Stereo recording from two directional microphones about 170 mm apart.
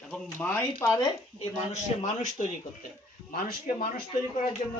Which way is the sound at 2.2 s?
45° left (ahead or behind).